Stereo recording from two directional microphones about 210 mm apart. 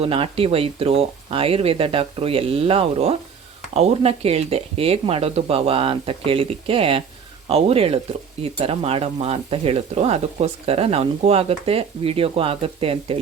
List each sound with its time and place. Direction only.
0.0 s speech: 25° right (ahead or behind)